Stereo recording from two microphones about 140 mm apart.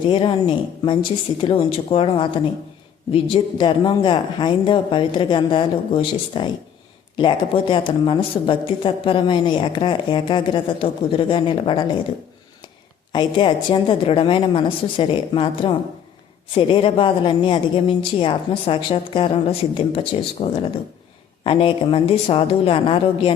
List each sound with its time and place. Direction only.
0.1 s a woman's voice: 35° left (ahead or behind)
13.1 s a woman's voice: 35° left (ahead or behind)